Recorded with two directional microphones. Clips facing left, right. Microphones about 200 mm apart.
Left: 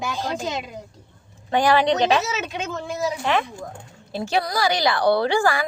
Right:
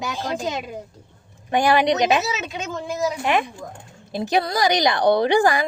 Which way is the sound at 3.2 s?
15° right (ahead or behind).